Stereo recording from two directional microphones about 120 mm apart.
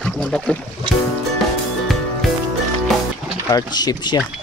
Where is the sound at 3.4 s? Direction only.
35° left (ahead or behind).